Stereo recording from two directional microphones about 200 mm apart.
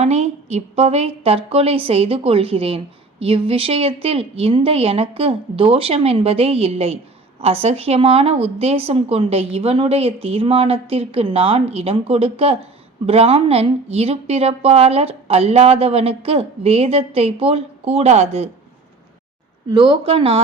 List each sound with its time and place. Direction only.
0.0 s a woman's voice: 35° right (ahead or behind)
19.7 s a woman's voice: 25° right (ahead or behind)